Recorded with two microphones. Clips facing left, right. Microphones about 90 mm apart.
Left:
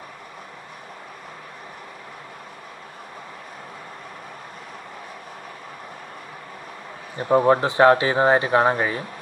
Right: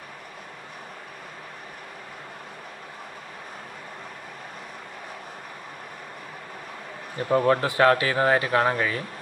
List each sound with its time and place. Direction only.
7.2 s speech: 20° left (ahead or behind)